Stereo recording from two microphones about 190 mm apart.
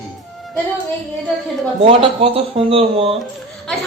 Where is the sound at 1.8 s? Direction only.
30° right (ahead or behind).